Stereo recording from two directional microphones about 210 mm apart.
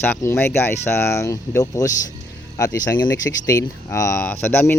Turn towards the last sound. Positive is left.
turn(degrees=10)  # may be behind; listen again after turning